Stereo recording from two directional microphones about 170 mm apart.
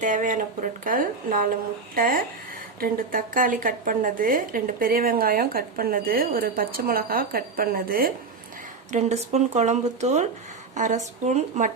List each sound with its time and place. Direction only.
0.0 s speech: 50° right (ahead or behind)
8.9 s speech: 40° right (ahead or behind)